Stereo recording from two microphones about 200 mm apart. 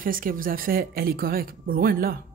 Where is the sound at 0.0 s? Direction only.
45° right (ahead or behind).